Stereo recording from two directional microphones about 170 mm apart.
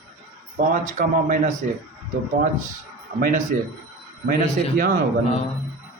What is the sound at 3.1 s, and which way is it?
Speech, 50° right (ahead or behind).